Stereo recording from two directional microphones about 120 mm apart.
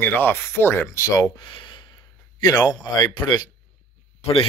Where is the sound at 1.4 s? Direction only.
40° left (ahead or behind).